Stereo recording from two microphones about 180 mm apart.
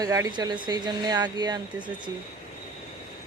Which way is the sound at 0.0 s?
20° right (ahead or behind).